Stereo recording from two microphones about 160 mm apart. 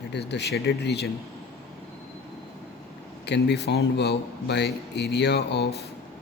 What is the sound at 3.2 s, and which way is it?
A man's voice, 90° left.